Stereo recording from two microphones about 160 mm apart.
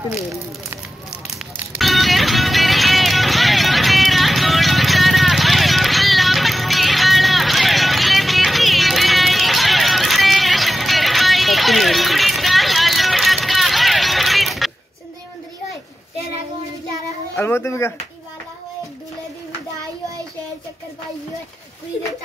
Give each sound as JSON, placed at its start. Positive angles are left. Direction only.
{"t": 0.3, "sound": "a sound", "side_deg": -20}
{"t": 1.8, "sound": "music", "side_deg": 0}
{"t": 17.4, "sound": "speech", "side_deg": 15}